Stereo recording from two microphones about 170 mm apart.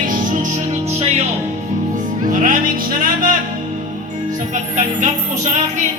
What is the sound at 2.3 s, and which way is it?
Music, 50° right (ahead or behind).